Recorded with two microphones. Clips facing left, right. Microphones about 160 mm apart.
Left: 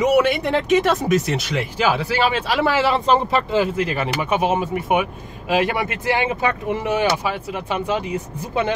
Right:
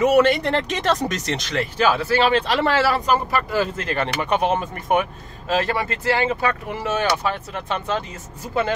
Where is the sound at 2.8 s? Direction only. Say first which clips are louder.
Left 2 dB; 25° left (ahead or behind).